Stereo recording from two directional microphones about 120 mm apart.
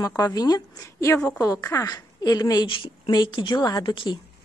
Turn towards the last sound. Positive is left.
turn(degrees=40)  # may be behind; listen again after turning